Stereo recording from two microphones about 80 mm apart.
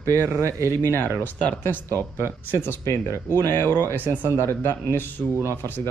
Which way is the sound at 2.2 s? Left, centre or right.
Right.